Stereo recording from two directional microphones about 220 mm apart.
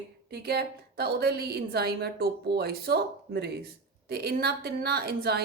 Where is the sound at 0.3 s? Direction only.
45° right (ahead or behind).